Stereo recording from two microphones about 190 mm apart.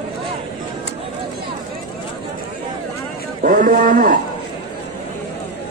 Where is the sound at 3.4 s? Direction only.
45° right (ahead or behind).